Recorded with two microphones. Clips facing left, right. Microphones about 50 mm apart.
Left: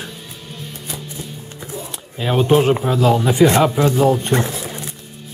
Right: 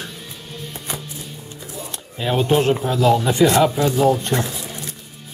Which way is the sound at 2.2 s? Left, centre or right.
Centre.